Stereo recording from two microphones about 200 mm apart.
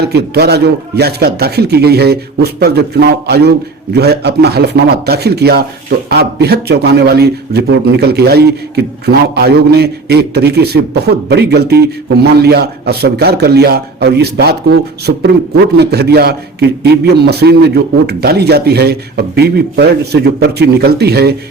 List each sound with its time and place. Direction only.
0.0 s a man's voice: 55° right (ahead or behind)